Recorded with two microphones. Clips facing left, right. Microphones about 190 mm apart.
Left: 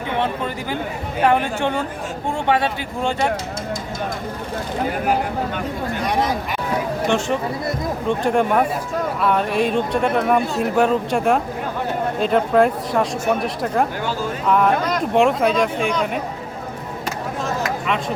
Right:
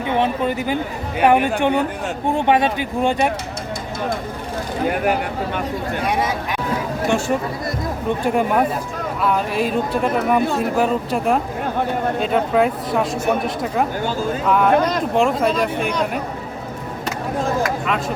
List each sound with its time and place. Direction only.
0.2 s speech: 15° right (ahead or behind)
6.1 s speech: 5° right (ahead or behind)
8.2 s speech: 5° right (ahead or behind)